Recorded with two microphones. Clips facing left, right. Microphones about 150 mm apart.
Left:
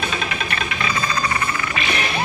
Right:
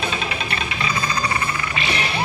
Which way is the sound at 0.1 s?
30° right (ahead or behind).